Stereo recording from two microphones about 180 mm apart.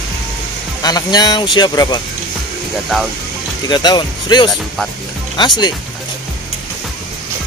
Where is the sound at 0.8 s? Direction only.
20° left (ahead or behind).